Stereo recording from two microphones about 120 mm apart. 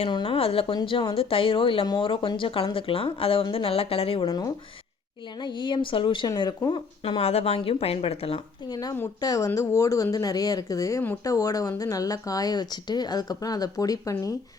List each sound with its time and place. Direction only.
0.1 s speech: 45° left (ahead or behind)
4.3 s speech: 30° left (ahead or behind)
7.0 s speech: 55° left (ahead or behind)
8.7 s speech: 35° left (ahead or behind)